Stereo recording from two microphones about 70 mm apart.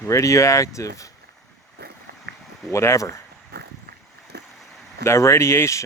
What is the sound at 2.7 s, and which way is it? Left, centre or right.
Speech, left.